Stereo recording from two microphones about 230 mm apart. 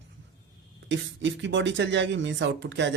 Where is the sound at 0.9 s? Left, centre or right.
Right.